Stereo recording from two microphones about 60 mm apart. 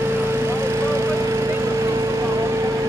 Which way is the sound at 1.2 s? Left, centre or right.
Right.